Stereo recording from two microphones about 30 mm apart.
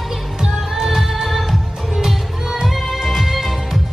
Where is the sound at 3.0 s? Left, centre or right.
Centre.